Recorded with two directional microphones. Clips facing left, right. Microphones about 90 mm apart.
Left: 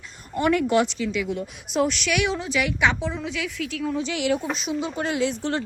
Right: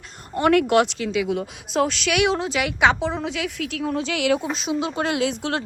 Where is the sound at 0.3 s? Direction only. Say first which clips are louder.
Right 3 dB; 85° right.